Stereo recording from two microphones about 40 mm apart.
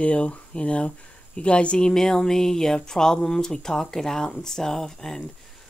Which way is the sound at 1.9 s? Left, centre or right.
Centre.